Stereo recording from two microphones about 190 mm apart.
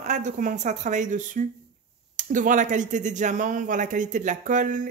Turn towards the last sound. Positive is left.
turn(degrees=-40)  # may be behind; listen again after turning